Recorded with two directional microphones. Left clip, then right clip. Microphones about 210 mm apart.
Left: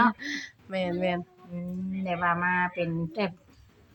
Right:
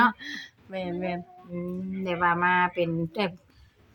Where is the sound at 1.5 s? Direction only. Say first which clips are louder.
Right 3 dB; 45° right (ahead or behind).